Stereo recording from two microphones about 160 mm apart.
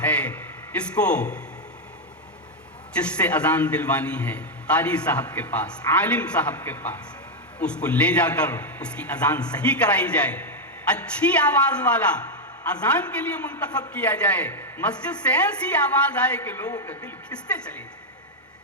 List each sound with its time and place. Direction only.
0.0 s a man's voice: 10° left (ahead or behind)
2.9 s a man's voice: 10° left (ahead or behind)